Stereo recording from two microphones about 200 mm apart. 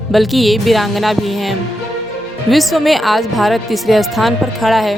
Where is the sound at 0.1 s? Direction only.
Centre (ahead or behind).